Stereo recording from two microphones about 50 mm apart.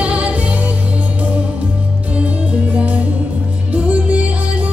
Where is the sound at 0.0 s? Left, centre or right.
Right.